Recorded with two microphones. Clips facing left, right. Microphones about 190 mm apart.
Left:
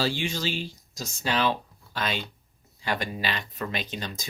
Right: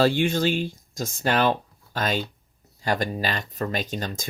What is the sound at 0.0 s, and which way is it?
Speech, 55° right (ahead or behind).